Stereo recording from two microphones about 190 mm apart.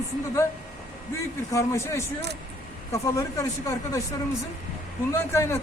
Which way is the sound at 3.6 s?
15° left (ahead or behind).